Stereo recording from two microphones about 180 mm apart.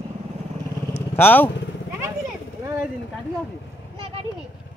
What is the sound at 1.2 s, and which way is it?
Speech, 10° left (ahead or behind).